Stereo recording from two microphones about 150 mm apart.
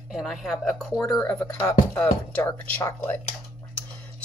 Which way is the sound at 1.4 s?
20° left (ahead or behind).